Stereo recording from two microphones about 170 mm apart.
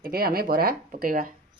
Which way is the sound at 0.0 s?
60° right (ahead or behind).